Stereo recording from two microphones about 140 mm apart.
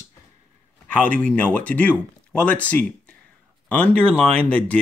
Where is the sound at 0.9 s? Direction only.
10° left (ahead or behind).